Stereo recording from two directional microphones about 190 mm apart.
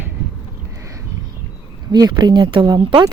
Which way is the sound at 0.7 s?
15° right (ahead or behind).